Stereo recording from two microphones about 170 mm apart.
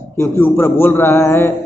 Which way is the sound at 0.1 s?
15° left (ahead or behind).